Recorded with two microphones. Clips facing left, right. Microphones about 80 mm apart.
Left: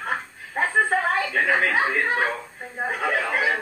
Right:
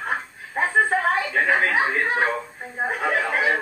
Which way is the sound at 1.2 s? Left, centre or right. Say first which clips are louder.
Right 1 dB; right.